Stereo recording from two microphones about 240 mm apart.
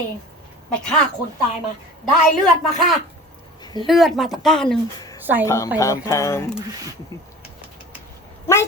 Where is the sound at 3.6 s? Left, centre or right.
Centre.